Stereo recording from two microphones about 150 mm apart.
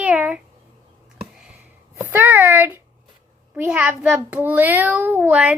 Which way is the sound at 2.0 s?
10° right (ahead or behind).